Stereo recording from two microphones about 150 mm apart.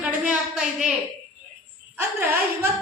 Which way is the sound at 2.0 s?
15° right (ahead or behind).